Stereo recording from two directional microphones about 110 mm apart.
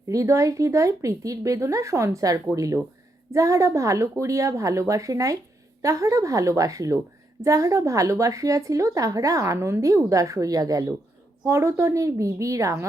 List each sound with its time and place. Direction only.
0.1 s a woman's voice: 30° right (ahead or behind)